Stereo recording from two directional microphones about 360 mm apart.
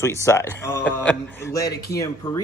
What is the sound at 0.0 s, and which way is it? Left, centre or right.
A man's voice, centre.